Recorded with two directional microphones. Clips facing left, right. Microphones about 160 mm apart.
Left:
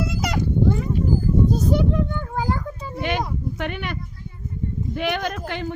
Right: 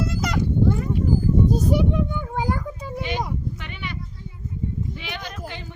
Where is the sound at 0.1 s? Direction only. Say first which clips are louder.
Even; centre (ahead or behind).